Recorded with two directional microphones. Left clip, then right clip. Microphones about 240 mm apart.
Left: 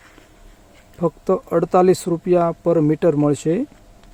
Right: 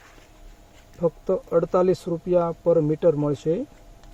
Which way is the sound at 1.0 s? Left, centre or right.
Left.